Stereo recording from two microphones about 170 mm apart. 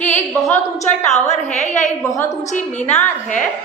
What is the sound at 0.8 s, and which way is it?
Speech, 40° left (ahead or behind).